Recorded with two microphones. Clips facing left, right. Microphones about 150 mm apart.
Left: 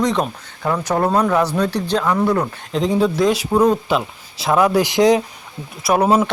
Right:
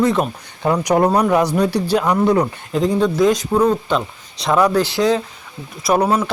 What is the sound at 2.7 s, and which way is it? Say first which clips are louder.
Speech: even; centre (ahead or behind).